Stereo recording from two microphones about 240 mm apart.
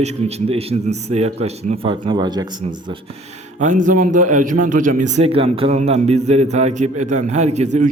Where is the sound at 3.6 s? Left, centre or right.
Right.